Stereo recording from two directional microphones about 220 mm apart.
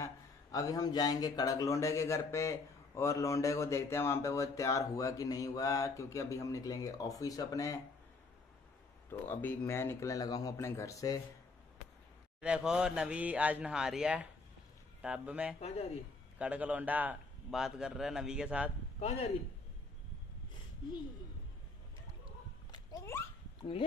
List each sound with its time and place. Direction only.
0.0 s speech: 15° left (ahead or behind)
9.3 s speech: 10° left (ahead or behind)
12.4 s a man's voice: 5° right (ahead or behind)
15.6 s speech: 30° left (ahead or behind)
16.3 s a man's voice: 5° right (ahead or behind)
18.9 s speech: 30° left (ahead or behind)
22.7 s a sound: 15° left (ahead or behind)